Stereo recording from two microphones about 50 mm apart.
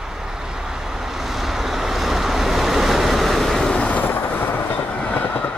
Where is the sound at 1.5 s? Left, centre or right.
Centre.